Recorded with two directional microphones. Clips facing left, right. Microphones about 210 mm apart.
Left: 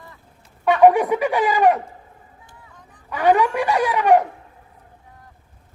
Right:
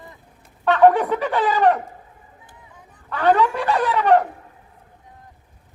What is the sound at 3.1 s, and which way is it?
Speech, 10° left (ahead or behind).